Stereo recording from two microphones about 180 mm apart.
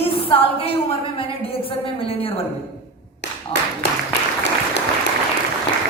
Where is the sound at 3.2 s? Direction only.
70° left (ahead or behind).